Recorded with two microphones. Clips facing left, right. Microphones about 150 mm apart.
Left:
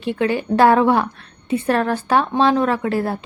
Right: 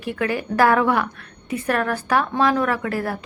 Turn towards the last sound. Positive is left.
turn(degrees=25)  # may be behind; listen again after turning